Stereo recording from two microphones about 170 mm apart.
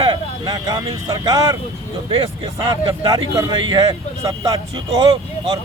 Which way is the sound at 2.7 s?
25° right (ahead or behind).